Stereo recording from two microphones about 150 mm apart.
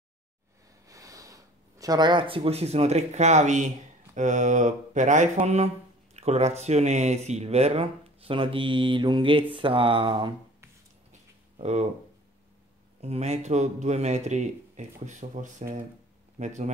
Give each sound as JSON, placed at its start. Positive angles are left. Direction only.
{"t": 0.8, "sound": "speech", "side_deg": -20}
{"t": 11.5, "sound": "speech", "side_deg": -50}
{"t": 13.0, "sound": "speech", "side_deg": -45}